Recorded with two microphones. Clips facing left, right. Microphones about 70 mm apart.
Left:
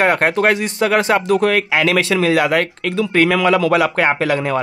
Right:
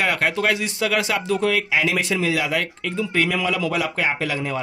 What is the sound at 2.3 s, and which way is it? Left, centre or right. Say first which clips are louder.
Speech: left 8 dB; left.